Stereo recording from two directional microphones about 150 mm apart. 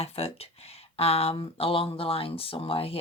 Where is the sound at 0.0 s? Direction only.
40° left (ahead or behind).